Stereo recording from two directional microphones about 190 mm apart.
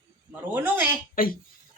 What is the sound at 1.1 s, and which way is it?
Speech, 50° left (ahead or behind).